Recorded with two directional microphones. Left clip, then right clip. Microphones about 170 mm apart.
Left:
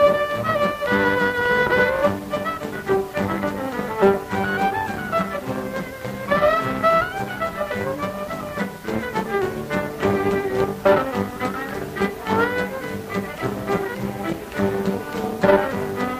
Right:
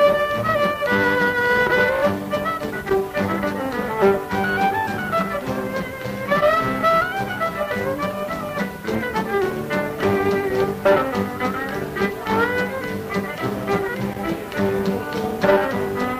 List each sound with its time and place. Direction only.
0.0 s music: 35° left (ahead or behind)
6.3 s music: 35° left (ahead or behind)
8.5 s music: 35° left (ahead or behind)
14.6 s music: 40° left (ahead or behind)